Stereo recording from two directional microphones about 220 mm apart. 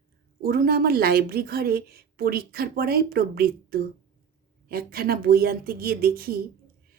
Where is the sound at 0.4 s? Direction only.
40° right (ahead or behind).